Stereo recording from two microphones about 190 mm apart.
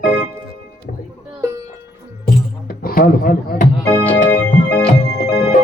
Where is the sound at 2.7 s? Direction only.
50° left (ahead or behind).